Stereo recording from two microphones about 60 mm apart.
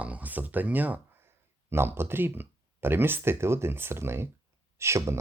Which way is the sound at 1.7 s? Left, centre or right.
Right.